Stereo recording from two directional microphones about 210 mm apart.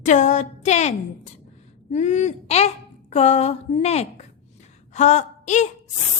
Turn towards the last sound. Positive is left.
turn(degrees=35)  # may be behind; listen again after turning